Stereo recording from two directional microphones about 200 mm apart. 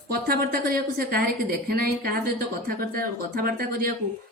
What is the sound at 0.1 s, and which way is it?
A woman's voice, 50° right (ahead or behind).